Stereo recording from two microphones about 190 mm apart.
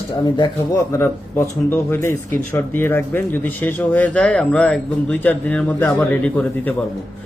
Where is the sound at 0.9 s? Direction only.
15° left (ahead or behind).